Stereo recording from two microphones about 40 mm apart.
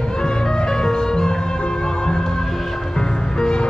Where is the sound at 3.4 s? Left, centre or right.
Centre.